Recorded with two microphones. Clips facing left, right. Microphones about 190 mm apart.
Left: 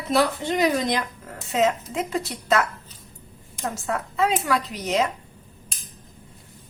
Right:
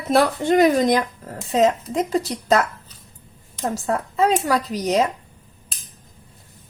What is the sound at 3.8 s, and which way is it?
Speech, 40° right (ahead or behind).